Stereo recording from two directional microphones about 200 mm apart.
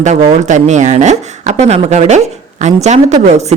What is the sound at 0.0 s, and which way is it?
Speech, 35° right (ahead or behind).